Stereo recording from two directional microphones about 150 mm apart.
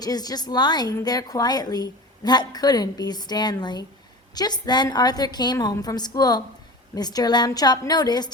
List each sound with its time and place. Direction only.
0.0 s a woman's voice: 25° left (ahead or behind)